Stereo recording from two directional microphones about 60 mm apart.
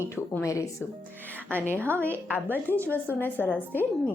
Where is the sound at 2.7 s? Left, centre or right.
Left.